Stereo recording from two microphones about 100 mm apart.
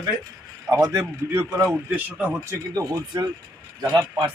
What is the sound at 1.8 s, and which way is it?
Speech, 15° right (ahead or behind).